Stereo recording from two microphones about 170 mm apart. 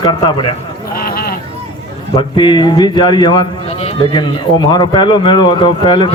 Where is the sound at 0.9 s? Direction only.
60° left (ahead or behind).